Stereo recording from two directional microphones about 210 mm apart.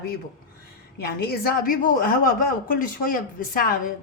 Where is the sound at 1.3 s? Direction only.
45° left (ahead or behind).